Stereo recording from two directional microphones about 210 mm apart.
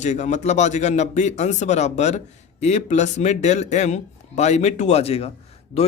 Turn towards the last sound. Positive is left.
turn(degrees=30)  # may be behind; listen again after turning